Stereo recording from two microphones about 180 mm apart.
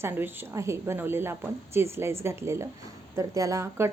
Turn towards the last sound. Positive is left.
turn(degrees=-15)  # may be behind; listen again after turning